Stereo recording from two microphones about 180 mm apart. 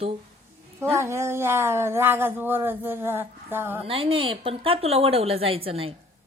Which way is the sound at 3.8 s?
30° right (ahead or behind).